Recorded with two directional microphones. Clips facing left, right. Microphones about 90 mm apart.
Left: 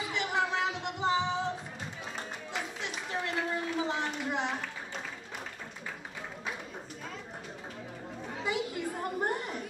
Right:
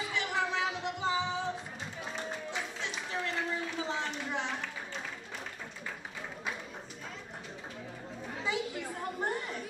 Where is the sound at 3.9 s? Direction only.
15° left (ahead or behind).